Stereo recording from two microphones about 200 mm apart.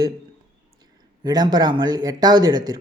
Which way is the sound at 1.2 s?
20° right (ahead or behind).